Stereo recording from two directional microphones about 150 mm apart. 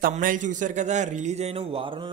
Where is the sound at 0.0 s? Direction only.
65° right (ahead or behind).